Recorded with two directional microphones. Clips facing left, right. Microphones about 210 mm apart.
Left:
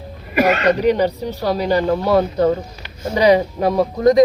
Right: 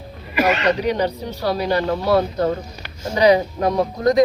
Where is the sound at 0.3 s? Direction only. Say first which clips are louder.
Left 3 dB; 55° left (ahead or behind).